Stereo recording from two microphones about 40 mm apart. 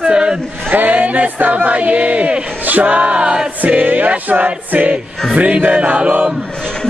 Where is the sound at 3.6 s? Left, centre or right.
Right.